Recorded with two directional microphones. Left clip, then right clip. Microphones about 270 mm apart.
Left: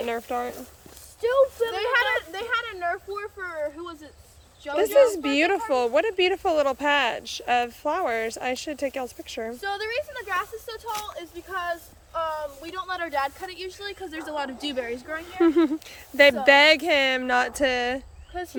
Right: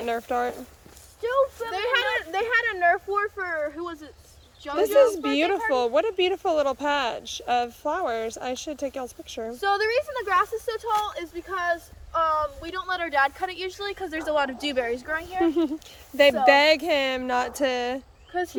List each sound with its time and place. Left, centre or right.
0.0 s speech: centre
1.2 s a sound: left
1.7 s speech: centre
9.6 s speech: centre
15.4 s speech: centre